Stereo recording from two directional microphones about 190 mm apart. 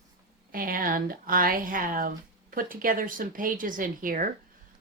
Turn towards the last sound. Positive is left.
turn(degrees=-45)  # may be behind; listen again after turning